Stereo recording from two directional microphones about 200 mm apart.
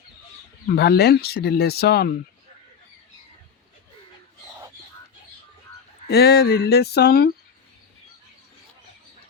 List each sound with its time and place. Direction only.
0.7 s speech: 50° left (ahead or behind)
6.1 s speech: 55° left (ahead or behind)